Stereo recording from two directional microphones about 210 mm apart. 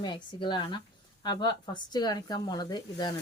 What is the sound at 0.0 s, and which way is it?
Speech, 20° left (ahead or behind).